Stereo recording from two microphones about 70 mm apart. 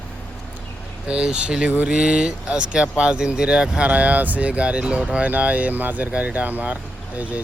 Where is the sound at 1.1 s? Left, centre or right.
Centre.